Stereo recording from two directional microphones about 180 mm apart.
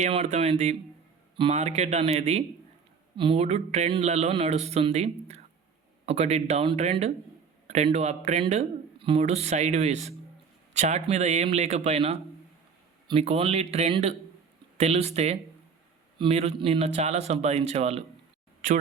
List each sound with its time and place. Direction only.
0.0 s a man's voice: 40° right (ahead or behind)